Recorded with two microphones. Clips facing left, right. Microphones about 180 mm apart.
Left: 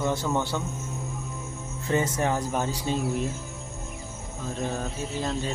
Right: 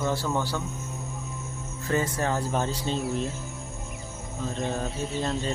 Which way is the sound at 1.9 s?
20° left (ahead or behind).